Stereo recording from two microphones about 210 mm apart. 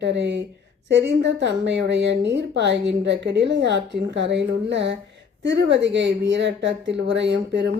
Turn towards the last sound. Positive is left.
turn(degrees=-55)  # may be behind; listen again after turning